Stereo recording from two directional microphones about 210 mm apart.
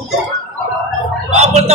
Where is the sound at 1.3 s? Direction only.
30° right (ahead or behind).